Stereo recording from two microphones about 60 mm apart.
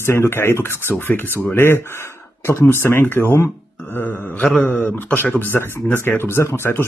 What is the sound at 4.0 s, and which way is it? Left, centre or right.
Speech, left.